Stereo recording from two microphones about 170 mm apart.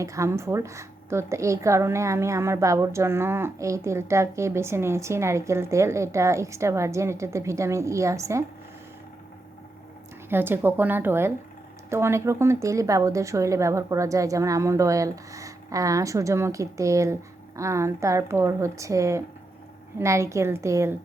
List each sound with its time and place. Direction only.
0.0 s a woman's voice: 20° right (ahead or behind)
10.2 s a woman's voice: 10° right (ahead or behind)